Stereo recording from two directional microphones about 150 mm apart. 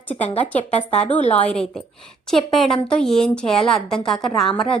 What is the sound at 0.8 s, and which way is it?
Speech, 50° left (ahead or behind).